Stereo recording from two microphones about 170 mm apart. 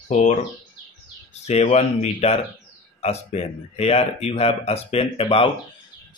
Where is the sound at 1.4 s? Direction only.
40° left (ahead or behind).